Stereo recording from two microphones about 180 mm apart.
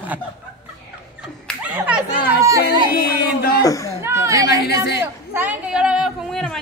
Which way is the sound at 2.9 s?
60° left (ahead or behind).